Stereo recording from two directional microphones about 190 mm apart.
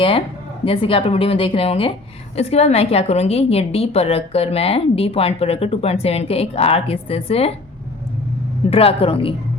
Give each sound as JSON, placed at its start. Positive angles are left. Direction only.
{"t": 0.6, "sound": "a woman's voice", "side_deg": 30}
{"t": 8.7, "sound": "speech", "side_deg": 30}